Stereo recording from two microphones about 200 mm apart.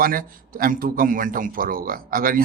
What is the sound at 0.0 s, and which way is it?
A man's voice, 45° right (ahead or behind).